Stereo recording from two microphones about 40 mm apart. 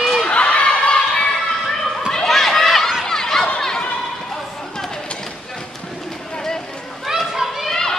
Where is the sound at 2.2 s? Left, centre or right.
Centre.